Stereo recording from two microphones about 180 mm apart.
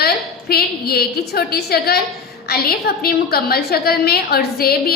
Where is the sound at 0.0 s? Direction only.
60° left (ahead or behind).